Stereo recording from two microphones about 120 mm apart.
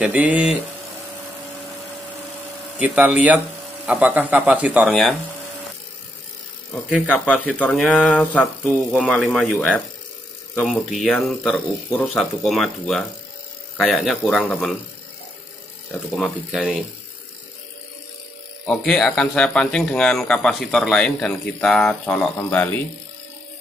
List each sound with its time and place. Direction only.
0.0 s a man's voice: 10° right (ahead or behind)
2.8 s a man's voice: 10° right (ahead or behind)
7.1 s speech: 10° left (ahead or behind)
7.7 s speech: centre (ahead or behind)
8.6 s speech: centre (ahead or behind)
12.2 s speech: centre (ahead or behind)
16.2 s speech: centre (ahead or behind)
18.7 s speech: 5° left (ahead or behind)